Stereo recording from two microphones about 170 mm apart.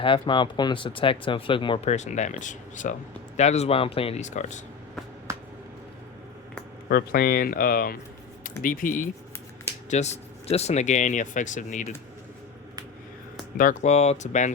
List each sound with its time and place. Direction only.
0.0 s speech: 30° left (ahead or behind); by 4.6 s 45° left (ahead or behind)
5.3 s a sound: 20° right (ahead or behind)
6.8 s speech: 65° left (ahead or behind)
9.9 s speech: 40° left (ahead or behind)
13.6 s speech: 50° left (ahead or behind)